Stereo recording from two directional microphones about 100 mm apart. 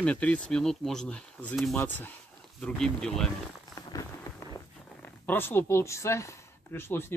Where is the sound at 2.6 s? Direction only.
10° left (ahead or behind).